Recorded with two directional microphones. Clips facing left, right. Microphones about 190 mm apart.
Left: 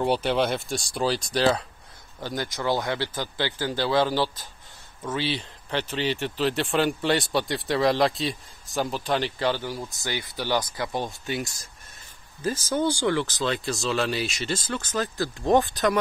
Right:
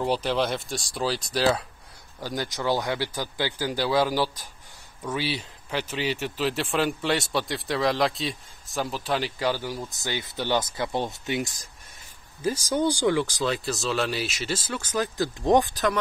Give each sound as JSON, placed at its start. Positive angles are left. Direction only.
{"t": 0.0, "sound": "speech", "side_deg": 5}
{"t": 2.2, "sound": "speech", "side_deg": -15}
{"t": 10.3, "sound": "speech", "side_deg": -20}